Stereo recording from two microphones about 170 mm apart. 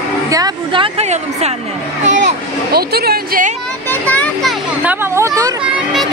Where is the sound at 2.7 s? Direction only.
65° right (ahead or behind).